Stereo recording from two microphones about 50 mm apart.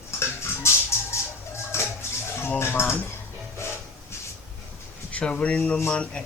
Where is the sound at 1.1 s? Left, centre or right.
Left.